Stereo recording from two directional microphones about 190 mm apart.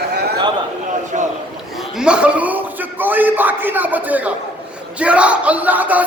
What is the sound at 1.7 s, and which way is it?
A man's voice, 5° right (ahead or behind).